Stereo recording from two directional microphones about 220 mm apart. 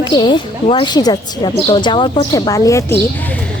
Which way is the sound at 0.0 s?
20° left (ahead or behind).